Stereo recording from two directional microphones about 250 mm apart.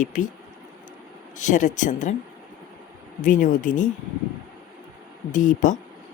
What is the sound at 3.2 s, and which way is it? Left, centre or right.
Speech, left.